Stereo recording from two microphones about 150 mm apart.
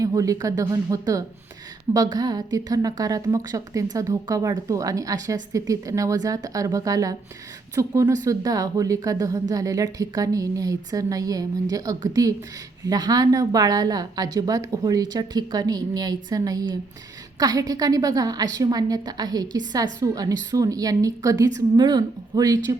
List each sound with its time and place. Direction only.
0.0 s a woman's voice: 20° right (ahead or behind)